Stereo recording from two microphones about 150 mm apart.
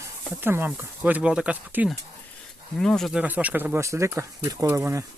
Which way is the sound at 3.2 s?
10° right (ahead or behind).